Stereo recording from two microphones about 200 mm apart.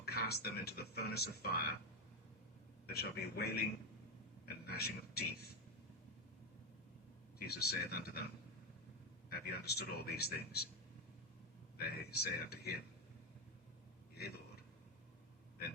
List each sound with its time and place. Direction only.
0.0 s speech: 55° left (ahead or behind)
2.8 s speech: 50° left (ahead or behind)
7.3 s speech: 50° left (ahead or behind)
9.3 s speech: 55° left (ahead or behind)
11.8 s speech: 55° left (ahead or behind)
14.2 s speech: 50° left (ahead or behind)